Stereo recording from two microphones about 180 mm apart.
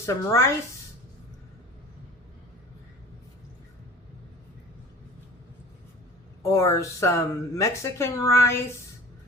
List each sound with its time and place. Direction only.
0.0 s speech: 15° left (ahead or behind)
6.4 s speech: 15° left (ahead or behind)